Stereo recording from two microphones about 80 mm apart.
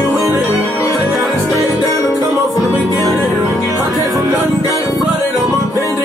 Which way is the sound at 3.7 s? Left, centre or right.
Right.